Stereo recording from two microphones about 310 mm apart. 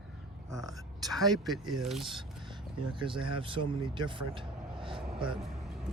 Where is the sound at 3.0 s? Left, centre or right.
Centre.